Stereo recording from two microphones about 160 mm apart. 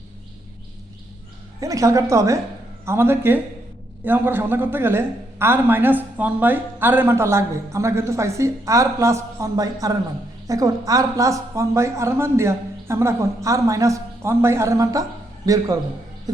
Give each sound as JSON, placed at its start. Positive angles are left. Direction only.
{"t": 1.6, "sound": "a man's voice", "side_deg": -20}